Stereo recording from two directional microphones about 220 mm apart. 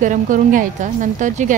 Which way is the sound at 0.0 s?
35° right (ahead or behind).